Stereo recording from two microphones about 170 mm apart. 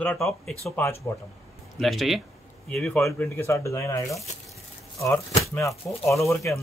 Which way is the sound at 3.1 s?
15° left (ahead or behind).